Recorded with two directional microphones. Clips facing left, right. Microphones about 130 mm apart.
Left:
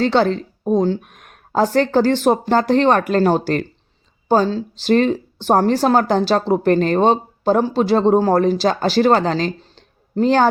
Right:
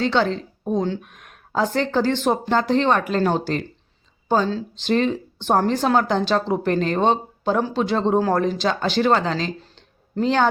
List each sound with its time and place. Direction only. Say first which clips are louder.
0.0 s a woman's voice: left 4 dB; 40° left (ahead or behind)
4.3 s speech: left 4 dB; 35° left (ahead or behind)
4.9 s speech: left 5 dB; 45° left (ahead or behind)